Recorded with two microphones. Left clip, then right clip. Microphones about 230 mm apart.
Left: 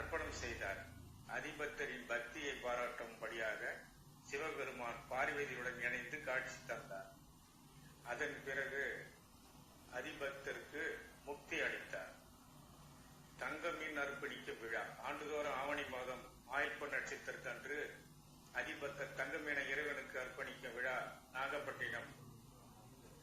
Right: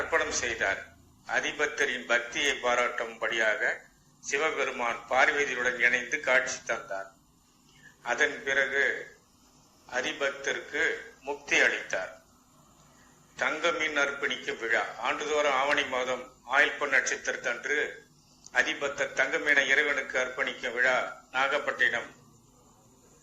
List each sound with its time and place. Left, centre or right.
0.1 s a man's voice: right
8.0 s a man's voice: right
9.9 s a man's voice: right
13.4 s a man's voice: right